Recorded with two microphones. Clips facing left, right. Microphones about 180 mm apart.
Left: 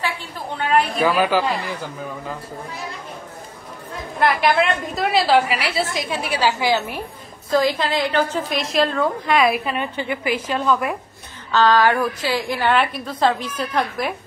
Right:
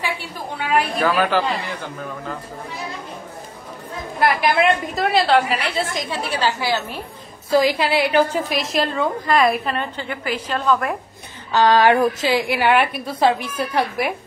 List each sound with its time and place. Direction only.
0.0 s a woman's voice: 10° right (ahead or behind)
1.0 s a woman's voice: 5° left (ahead or behind)
4.2 s a woman's voice: 5° right (ahead or behind); by 7.0 s 15° left (ahead or behind)
7.5 s a woman's voice: 10° right (ahead or behind)
9.8 s a woman's voice: 10° left (ahead or behind)
11.5 s a sound: 20° right (ahead or behind)
12.3 s a woman's voice: 15° right (ahead or behind)